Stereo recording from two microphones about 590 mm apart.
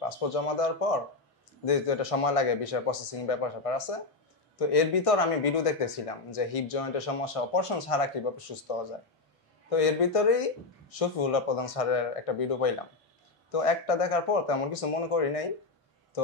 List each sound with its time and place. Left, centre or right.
0.0 s speech: left
9.7 s speech: left